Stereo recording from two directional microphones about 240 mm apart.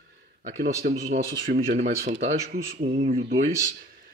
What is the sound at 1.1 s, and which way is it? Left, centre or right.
Speech, right.